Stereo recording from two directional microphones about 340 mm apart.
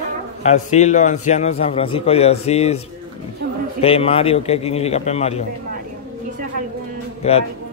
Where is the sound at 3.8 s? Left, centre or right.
Centre.